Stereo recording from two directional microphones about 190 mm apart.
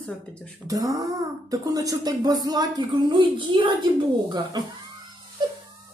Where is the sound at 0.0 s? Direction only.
5° left (ahead or behind).